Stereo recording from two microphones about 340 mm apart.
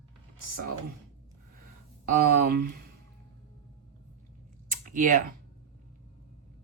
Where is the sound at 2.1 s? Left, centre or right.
Right.